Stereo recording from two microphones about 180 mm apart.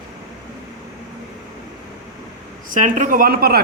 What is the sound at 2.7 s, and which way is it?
Speech, 45° right (ahead or behind).